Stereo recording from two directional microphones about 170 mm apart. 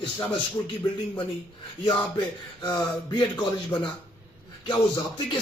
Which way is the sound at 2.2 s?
25° left (ahead or behind).